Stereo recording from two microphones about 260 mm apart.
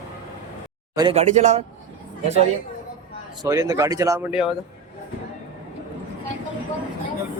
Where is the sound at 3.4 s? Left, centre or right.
Centre.